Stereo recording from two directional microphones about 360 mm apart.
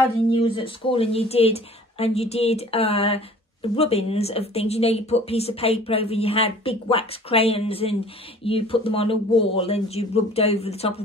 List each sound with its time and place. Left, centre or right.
0.3 s speech: centre